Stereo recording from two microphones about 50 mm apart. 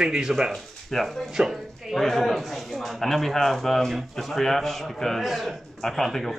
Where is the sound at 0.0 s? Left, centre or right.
Centre.